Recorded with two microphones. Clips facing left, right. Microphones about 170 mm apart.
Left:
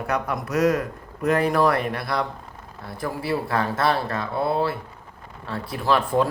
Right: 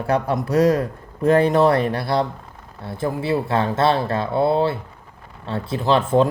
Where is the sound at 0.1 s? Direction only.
30° right (ahead or behind).